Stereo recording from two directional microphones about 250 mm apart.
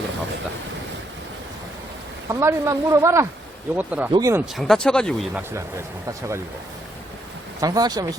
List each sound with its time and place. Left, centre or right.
2.3 s speech: centre
4.5 s speech: centre
5.4 s speech: centre
7.6 s speech: centre